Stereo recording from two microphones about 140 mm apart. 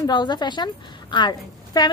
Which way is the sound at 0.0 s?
30° left (ahead or behind).